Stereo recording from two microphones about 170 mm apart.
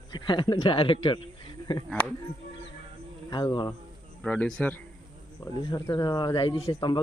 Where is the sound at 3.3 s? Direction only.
25° left (ahead or behind).